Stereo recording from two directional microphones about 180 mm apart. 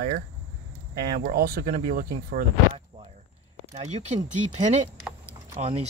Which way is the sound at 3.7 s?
40° right (ahead or behind).